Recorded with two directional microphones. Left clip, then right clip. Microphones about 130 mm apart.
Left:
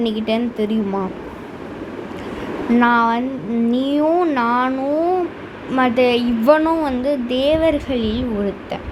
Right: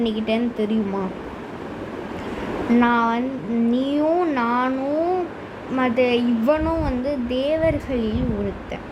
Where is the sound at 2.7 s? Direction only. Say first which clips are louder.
Left 4 dB; 35° left (ahead or behind).